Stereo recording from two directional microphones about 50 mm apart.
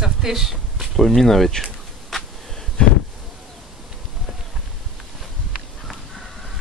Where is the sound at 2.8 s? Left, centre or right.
Centre.